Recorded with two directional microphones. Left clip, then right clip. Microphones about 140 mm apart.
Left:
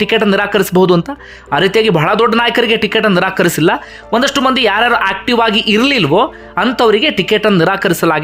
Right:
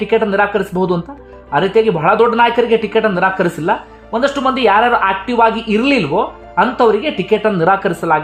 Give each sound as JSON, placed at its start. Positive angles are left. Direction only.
{"t": 0.0, "sound": "speech", "side_deg": 35}